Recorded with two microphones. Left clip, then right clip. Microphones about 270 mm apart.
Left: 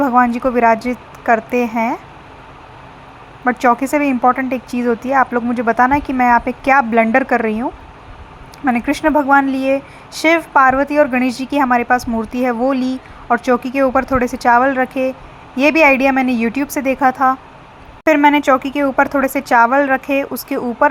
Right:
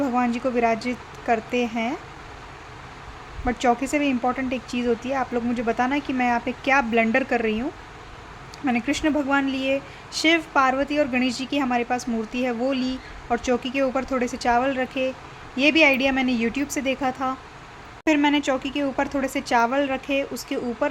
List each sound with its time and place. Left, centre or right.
0.0 s speech: centre
3.4 s speech: centre